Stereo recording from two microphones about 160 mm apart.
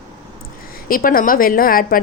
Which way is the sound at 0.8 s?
60° left (ahead or behind).